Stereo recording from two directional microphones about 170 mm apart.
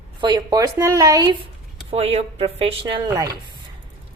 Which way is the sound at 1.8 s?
35° right (ahead or behind).